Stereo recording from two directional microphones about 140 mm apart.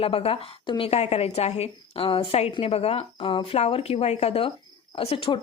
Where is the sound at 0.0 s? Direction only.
45° left (ahead or behind).